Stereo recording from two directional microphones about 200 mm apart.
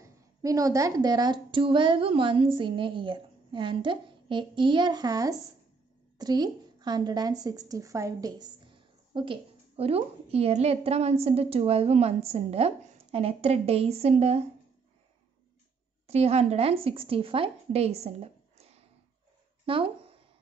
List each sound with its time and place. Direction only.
0.0 s a woman's voice: 15° right (ahead or behind)
16.1 s speech: 30° right (ahead or behind)
19.6 s a sound: 25° right (ahead or behind)